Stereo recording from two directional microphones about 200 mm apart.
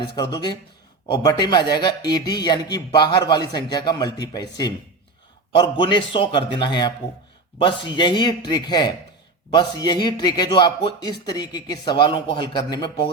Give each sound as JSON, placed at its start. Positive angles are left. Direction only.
{"t": 0.0, "sound": "a man's voice", "side_deg": 20}
{"t": 5.8, "sound": "a man's voice", "side_deg": 25}